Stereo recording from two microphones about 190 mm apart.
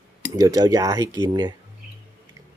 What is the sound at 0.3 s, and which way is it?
Speech, 20° right (ahead or behind).